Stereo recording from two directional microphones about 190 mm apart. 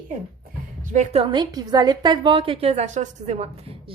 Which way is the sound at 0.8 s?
40° right (ahead or behind).